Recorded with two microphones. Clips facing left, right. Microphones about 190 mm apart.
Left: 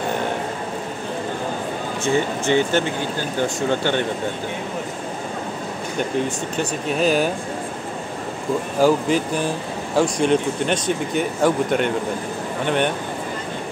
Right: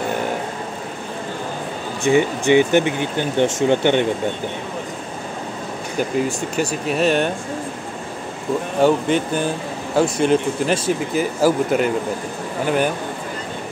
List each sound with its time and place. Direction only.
2.0 s speech: 15° right (ahead or behind)
5.9 s speech: 5° right (ahead or behind)
7.0 s speech: centre (ahead or behind)
8.7 s speech: centre (ahead or behind)